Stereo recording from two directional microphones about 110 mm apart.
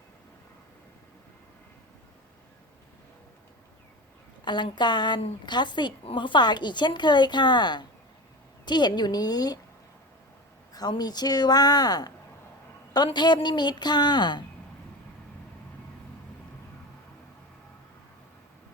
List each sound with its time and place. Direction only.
4.4 s speech: 45° left (ahead or behind)
10.7 s speech: 35° left (ahead or behind)
13.1 s speech: 45° left (ahead or behind)